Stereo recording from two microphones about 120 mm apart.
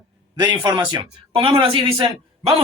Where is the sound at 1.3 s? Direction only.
45° right (ahead or behind).